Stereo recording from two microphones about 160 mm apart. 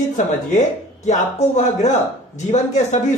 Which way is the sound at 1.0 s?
45° left (ahead or behind).